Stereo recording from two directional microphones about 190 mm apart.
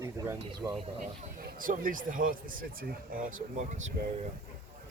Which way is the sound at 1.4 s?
45° right (ahead or behind).